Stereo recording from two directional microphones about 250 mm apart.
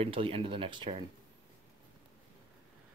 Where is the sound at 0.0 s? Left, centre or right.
Right.